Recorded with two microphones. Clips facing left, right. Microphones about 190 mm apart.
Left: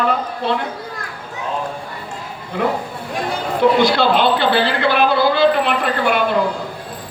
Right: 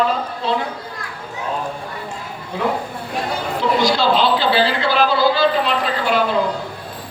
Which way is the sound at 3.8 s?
60° left (ahead or behind).